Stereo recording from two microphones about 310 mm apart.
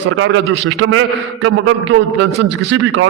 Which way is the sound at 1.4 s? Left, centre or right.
Right.